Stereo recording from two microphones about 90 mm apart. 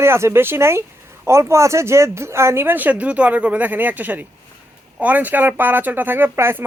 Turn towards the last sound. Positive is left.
turn(degrees=-25)  # may be behind; listen again after turning